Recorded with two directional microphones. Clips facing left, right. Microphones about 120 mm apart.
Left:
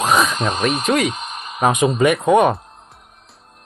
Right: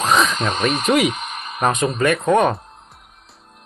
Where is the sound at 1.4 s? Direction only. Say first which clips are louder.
Left 3 dB; 10° left (ahead or behind).